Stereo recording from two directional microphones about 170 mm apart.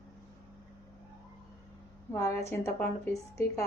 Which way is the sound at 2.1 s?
15° left (ahead or behind).